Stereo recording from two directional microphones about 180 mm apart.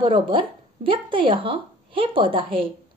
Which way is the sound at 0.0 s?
30° right (ahead or behind).